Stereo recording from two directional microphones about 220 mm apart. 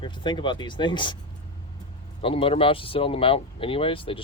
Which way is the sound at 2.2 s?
25° left (ahead or behind).